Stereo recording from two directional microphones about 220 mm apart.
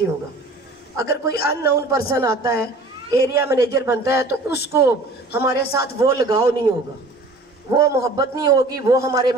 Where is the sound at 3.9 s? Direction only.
15° right (ahead or behind).